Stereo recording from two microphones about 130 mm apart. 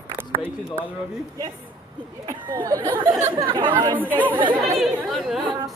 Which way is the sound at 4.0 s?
15° right (ahead or behind).